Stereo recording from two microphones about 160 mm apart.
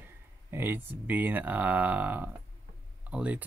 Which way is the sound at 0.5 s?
15° right (ahead or behind).